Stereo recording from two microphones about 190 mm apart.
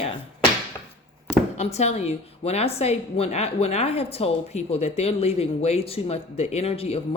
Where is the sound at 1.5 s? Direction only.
35° left (ahead or behind).